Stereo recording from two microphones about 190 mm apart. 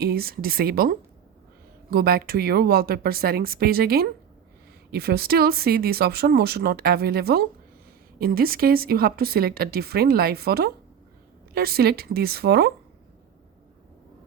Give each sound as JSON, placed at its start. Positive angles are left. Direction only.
{"t": 0.0, "sound": "speech", "side_deg": -55}